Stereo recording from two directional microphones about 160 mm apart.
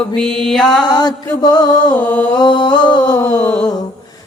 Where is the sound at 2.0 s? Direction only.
10° left (ahead or behind).